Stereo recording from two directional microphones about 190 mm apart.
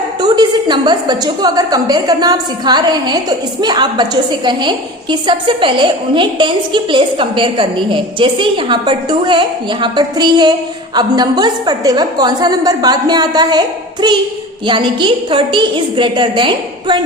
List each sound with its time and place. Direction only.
0.2 s a woman's voice: 20° right (ahead or behind)